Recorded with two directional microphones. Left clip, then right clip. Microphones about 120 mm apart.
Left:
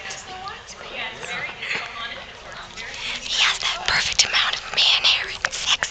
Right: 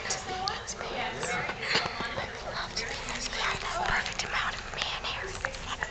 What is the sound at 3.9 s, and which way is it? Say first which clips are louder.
Whispering: left 14 dB; 35° left (ahead or behind).